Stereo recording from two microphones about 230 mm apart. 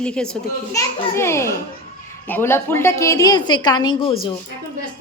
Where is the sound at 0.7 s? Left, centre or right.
Centre.